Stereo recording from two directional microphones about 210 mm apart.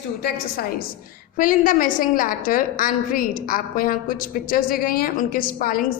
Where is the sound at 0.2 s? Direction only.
45° left (ahead or behind).